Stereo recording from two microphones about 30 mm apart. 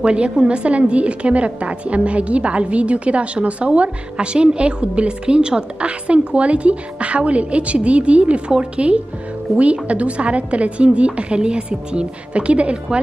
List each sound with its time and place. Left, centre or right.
0.0 s a woman's voice: right
5.8 s a woman's voice: right